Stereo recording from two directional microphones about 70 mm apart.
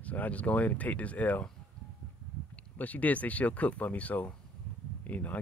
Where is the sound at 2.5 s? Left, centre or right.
Left.